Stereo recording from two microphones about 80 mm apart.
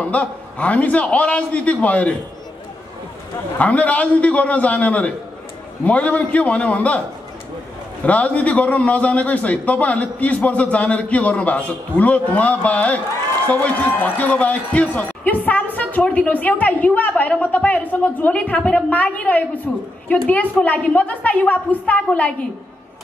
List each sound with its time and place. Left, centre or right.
0.0 s a man's voice: centre
3.5 s a man's voice: centre
8.0 s a man's voice: centre